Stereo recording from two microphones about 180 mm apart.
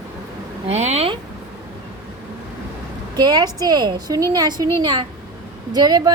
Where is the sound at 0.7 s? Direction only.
35° right (ahead or behind).